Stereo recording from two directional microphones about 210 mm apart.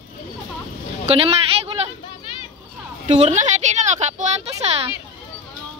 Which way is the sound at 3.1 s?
35° right (ahead or behind).